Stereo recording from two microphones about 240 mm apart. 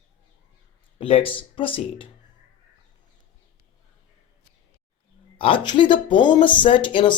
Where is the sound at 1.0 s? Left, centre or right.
Left.